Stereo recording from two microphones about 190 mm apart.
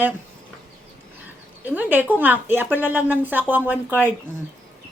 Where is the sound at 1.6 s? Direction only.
10° right (ahead or behind).